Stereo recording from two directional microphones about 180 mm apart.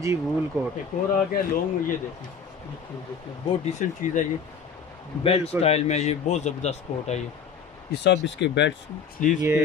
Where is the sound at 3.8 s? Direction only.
45° left (ahead or behind).